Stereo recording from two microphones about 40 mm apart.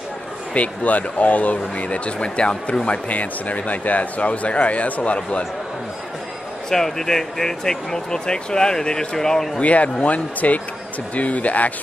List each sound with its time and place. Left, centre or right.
0.6 s speech: left
6.7 s speech: centre
9.6 s speech: left